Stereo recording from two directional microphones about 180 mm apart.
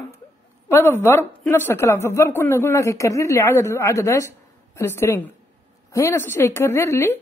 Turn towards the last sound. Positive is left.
turn(degrees=15)  # may be behind; listen again after turning